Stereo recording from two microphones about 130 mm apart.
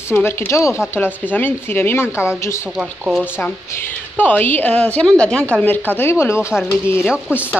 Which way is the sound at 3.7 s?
15° left (ahead or behind).